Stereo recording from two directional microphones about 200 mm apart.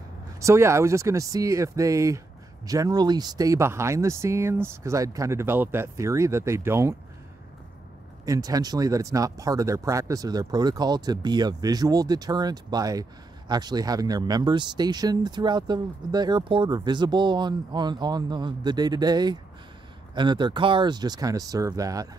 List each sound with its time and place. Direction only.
0.4 s speech: 15° right (ahead or behind)
8.3 s speech: 20° right (ahead or behind)